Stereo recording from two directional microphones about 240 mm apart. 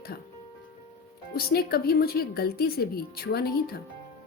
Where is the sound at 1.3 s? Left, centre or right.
Left.